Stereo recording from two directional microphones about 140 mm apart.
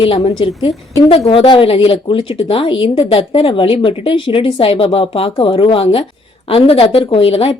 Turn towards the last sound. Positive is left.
turn(degrees=40)  # may be behind; listen again after turning